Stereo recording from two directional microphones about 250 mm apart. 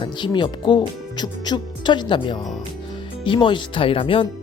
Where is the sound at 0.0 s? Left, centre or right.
Centre.